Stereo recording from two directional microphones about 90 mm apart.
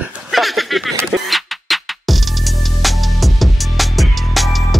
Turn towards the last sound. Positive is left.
turn(degrees=0)  # may be behind; listen again after turning